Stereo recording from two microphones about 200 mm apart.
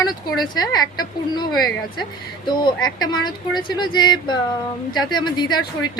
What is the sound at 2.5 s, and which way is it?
Speech, 20° left (ahead or behind).